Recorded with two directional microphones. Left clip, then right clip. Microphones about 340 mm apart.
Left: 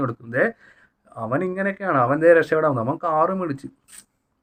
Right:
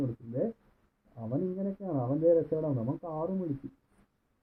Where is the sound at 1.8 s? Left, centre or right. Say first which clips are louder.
Left 12 dB; left.